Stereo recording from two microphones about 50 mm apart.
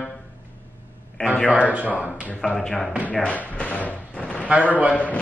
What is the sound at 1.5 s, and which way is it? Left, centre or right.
Speech, right.